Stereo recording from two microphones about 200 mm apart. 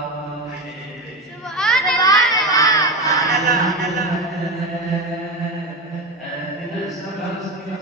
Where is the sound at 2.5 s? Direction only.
15° left (ahead or behind).